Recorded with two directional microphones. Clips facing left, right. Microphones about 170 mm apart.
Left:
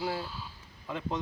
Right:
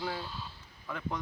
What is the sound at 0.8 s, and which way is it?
Speech, 25° left (ahead or behind).